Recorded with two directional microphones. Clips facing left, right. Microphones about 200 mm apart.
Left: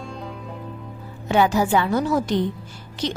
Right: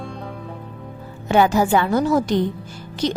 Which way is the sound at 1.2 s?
50° right (ahead or behind).